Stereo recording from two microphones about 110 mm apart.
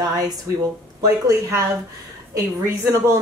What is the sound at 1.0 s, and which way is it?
A woman's voice, 30° right (ahead or behind).